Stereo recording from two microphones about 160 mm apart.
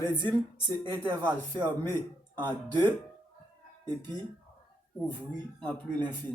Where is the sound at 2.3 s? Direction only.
30° right (ahead or behind).